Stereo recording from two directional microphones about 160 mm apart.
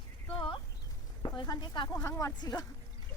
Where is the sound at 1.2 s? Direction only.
25° left (ahead or behind).